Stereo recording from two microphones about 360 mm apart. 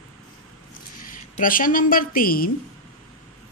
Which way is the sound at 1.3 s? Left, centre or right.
Left.